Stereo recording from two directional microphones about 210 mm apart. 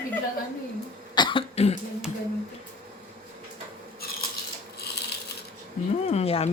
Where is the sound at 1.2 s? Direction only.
20° left (ahead or behind).